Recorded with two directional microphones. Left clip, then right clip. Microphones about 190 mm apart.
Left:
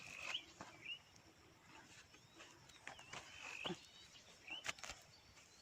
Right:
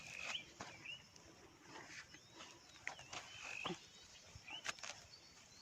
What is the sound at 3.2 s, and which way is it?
Frog, 25° right (ahead or behind).